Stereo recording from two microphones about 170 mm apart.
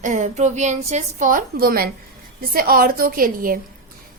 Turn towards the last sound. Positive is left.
turn(degrees=-55)  # may be behind; listen again after turning